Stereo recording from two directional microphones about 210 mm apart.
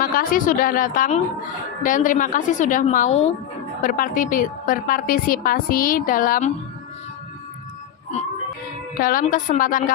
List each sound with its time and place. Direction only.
0.0 s a woman's voice: 40° left (ahead or behind)
9.0 s a woman's voice: 40° left (ahead or behind)